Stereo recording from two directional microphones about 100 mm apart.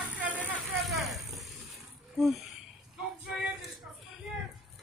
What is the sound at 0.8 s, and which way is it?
Vehicle, centre (ahead or behind).